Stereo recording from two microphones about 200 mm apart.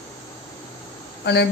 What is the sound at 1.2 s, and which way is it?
Speech, 55° left (ahead or behind).